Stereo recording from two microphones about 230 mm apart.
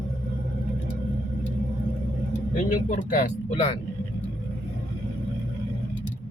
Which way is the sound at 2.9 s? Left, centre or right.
Left.